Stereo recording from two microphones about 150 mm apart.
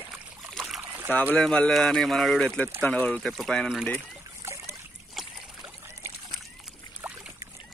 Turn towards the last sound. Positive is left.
turn(degrees=-10)  # may be behind; listen again after turning